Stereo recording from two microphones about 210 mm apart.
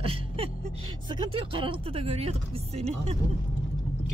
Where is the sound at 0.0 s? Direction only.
25° right (ahead or behind).